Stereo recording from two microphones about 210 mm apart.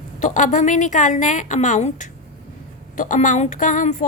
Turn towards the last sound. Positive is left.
turn(degrees=40)  # may be behind; listen again after turning